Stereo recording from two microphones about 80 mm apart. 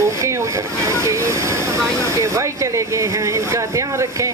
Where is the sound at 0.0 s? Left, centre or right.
Right.